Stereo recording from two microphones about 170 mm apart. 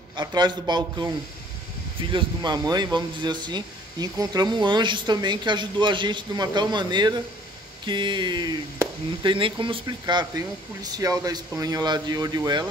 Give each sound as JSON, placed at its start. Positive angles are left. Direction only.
{"t": 0.1, "sound": "speech", "side_deg": -25}
{"t": 2.1, "sound": "speech", "side_deg": -25}